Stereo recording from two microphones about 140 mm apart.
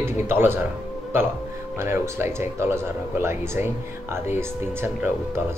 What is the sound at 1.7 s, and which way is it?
Speech, 20° right (ahead or behind).